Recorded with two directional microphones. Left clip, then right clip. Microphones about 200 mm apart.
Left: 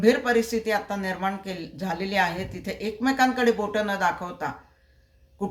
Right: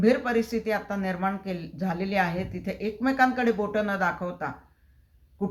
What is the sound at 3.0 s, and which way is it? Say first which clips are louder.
Speech: left 2 dB; 20° left (ahead or behind).